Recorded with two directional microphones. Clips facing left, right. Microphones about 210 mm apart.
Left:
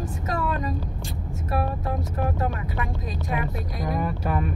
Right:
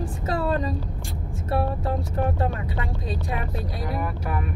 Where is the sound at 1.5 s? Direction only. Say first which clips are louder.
Right 2 dB; 30° right (ahead or behind).